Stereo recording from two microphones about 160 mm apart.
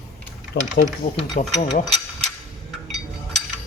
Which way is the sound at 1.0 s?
50° left (ahead or behind).